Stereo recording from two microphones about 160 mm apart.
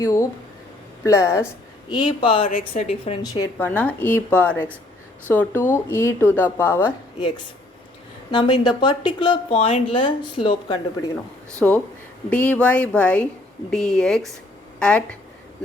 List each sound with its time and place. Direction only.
0.0 s speech: 20° left (ahead or behind)
1.9 s speech: 30° left (ahead or behind)
2.5 s a woman's voice: 45° left (ahead or behind)
3.6 s speech: 10° left (ahead or behind)
7.2 s speech: 30° left (ahead or behind)
11.6 s a woman's voice: 5° left (ahead or behind)